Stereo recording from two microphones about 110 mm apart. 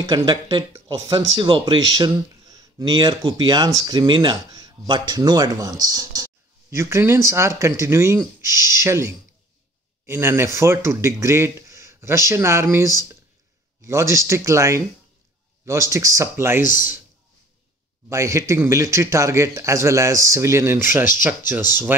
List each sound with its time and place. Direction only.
0.0 s speech: 40° right (ahead or behind); by 16.9 s 20° right (ahead or behind)
18.1 s speech: 25° right (ahead or behind)